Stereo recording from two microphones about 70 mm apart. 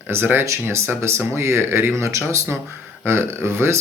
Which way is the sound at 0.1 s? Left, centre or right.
Right.